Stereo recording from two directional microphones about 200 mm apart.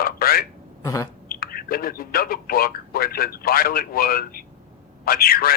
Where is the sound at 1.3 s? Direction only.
50° left (ahead or behind).